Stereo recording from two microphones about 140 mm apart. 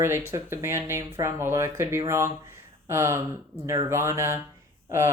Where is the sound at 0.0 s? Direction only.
15° right (ahead or behind).